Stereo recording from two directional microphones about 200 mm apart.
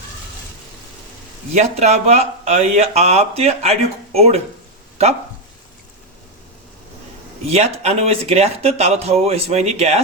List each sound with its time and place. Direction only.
1.5 s speech: 35° right (ahead or behind)
7.4 s speech: 30° right (ahead or behind)